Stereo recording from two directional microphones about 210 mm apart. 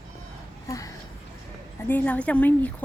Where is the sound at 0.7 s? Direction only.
15° left (ahead or behind).